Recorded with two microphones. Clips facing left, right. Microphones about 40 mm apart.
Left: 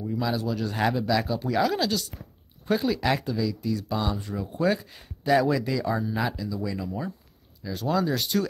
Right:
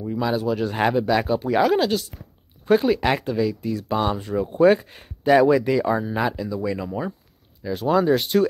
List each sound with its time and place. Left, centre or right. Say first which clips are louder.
0.0 s speech: right 5 dB; right
6.9 s speech: right 5 dB; right